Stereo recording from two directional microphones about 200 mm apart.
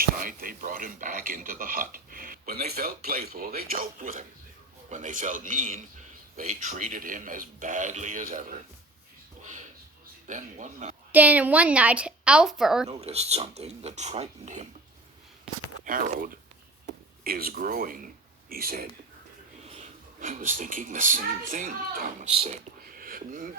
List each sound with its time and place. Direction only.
0.0 s speech: 45° right (ahead or behind)
10.2 s speech: 40° right (ahead or behind)
11.1 s a woman's voice: 10° right (ahead or behind)
12.9 s speech: 30° right (ahead or behind)
15.8 s speech: 45° right (ahead or behind)
19.6 s speech: 35° right (ahead or behind)